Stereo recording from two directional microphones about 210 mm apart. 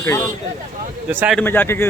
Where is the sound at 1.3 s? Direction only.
10° left (ahead or behind).